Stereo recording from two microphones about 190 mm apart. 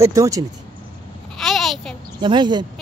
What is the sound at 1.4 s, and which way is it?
Speech, centre (ahead or behind).